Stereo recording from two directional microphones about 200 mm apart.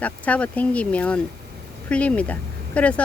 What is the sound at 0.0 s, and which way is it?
Speech, 5° left (ahead or behind).